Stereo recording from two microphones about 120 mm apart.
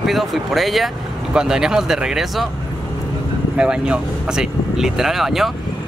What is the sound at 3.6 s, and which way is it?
Speech, 5° right (ahead or behind).